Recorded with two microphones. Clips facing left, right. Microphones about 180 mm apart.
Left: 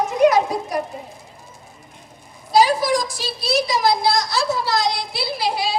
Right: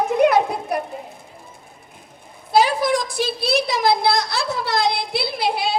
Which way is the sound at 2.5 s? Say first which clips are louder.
Left 1 dB; 60° right (ahead or behind).